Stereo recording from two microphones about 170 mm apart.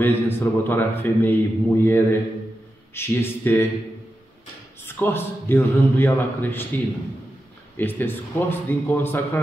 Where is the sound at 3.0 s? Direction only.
15° left (ahead or behind).